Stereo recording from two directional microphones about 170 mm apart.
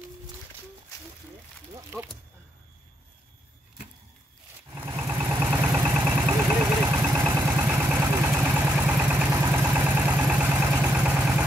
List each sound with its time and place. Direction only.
1.9 s speech: 10° right (ahead or behind)
4.8 s vehicle: 15° right (ahead or behind)